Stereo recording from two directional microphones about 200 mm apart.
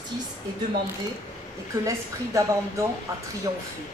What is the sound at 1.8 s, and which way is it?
Speech, 15° right (ahead or behind).